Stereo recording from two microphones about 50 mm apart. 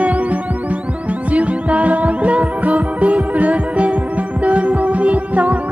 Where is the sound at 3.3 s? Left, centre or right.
Right.